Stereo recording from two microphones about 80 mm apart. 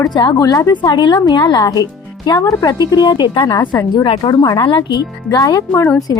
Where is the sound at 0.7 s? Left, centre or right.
Left.